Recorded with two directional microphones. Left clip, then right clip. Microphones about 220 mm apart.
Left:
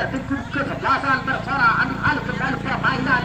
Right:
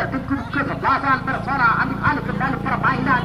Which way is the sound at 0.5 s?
15° left (ahead or behind).